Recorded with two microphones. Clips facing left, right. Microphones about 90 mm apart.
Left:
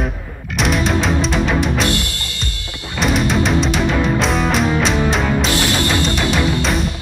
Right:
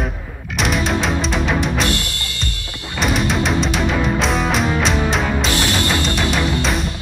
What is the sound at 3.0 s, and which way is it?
Music, centre (ahead or behind).